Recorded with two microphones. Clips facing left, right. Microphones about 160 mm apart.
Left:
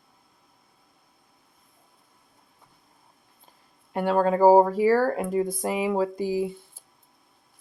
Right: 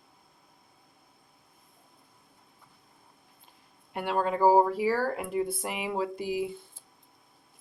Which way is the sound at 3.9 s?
45° left (ahead or behind).